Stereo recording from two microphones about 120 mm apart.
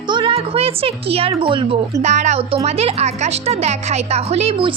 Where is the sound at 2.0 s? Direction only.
70° right (ahead or behind).